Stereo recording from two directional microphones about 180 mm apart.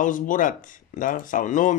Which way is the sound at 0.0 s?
45° left (ahead or behind).